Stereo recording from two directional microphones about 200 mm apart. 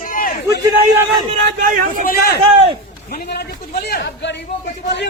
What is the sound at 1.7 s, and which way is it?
Speech, 40° right (ahead or behind).